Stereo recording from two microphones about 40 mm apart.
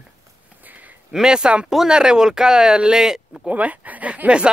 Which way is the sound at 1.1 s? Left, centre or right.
Centre.